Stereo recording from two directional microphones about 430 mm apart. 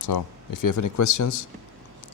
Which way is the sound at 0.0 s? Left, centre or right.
Left.